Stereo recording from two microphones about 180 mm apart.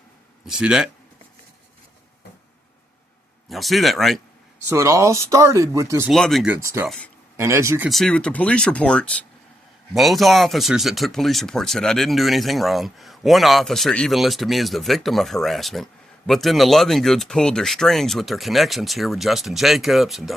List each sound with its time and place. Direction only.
0.4 s speech: 5° right (ahead or behind)
3.5 s speech: centre (ahead or behind)
4.7 s speech: 15° right (ahead or behind)
6.1 s speech: centre (ahead or behind)
6.5 s speech: 15° right (ahead or behind)
6.8 s speech: 5° left (ahead or behind)
7.3 s speech: 15° right (ahead or behind)
7.9 s speech: centre (ahead or behind)